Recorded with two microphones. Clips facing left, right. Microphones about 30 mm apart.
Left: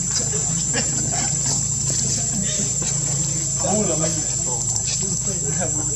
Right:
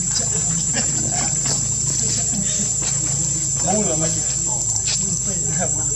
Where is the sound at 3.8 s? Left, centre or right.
Centre.